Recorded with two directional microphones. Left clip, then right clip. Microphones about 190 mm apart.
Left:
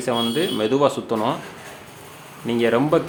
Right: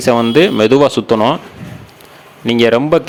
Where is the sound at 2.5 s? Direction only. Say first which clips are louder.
Right 8 dB; 45° right (ahead or behind).